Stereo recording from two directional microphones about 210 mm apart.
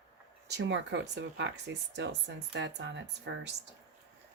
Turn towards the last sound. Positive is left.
turn(degrees=-55)  # may be behind; listen again after turning